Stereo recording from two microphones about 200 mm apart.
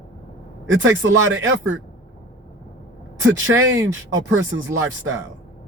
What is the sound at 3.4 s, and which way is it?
Speech, 80° right.